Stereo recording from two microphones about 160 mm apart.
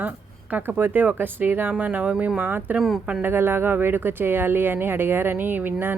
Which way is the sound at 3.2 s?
15° right (ahead or behind).